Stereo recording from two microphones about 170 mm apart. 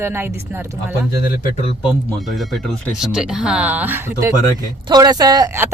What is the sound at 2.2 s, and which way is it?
Speech, centre (ahead or behind).